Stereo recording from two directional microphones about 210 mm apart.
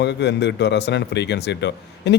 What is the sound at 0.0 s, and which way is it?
Speech, 55° left (ahead or behind).